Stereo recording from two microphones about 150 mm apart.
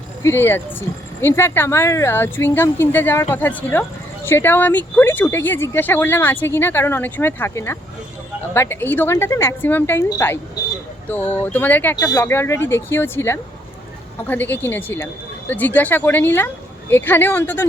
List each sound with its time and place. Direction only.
0.2 s speech: 15° left (ahead or behind)
11.9 s speech: 25° left (ahead or behind)
12.2 s speech: 15° left (ahead or behind)